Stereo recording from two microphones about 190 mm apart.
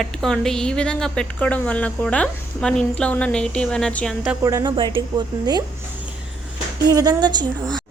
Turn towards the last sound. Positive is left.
turn(degrees=-20)  # may be behind; listen again after turning